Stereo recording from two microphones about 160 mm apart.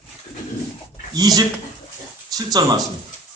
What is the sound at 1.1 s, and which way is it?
Speech, 25° right (ahead or behind).